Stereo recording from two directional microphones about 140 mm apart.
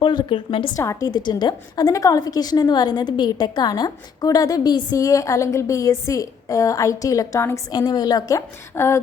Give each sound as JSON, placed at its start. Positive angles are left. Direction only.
{"t": 0.0, "sound": "a woman's voice", "side_deg": 35}
{"t": 0.8, "sound": "a woman's voice", "side_deg": 20}